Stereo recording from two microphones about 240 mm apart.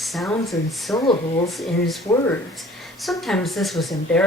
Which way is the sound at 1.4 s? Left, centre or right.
Centre.